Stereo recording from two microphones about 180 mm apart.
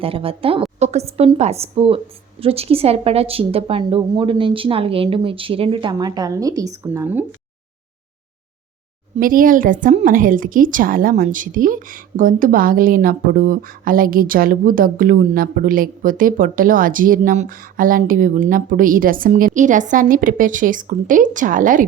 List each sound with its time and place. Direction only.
0.0 s a woman's voice: 30° right (ahead or behind); by 7.3 s 15° right (ahead or behind)
9.1 s a woman's voice: 50° right (ahead or behind)